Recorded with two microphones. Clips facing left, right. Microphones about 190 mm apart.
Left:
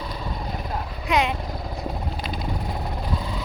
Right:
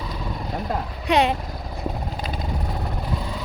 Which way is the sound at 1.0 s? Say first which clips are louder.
Right 3 dB; 35° right (ahead or behind).